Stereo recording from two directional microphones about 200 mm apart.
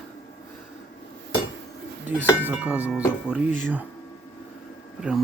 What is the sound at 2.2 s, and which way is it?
Speech, 10° right (ahead or behind).